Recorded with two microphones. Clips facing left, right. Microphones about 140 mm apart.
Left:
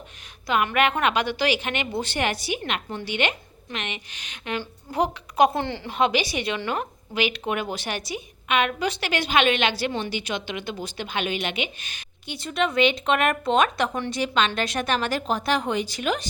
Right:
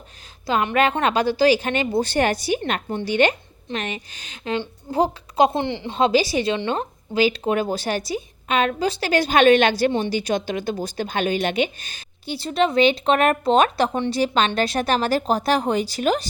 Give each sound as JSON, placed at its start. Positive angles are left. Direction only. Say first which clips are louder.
{"t": 0.4, "sound": "a woman's voice", "louder": "right 2 dB", "side_deg": -30}
{"t": 6.0, "sound": "a woman's voice", "louder": "right 5 dB", "side_deg": -35}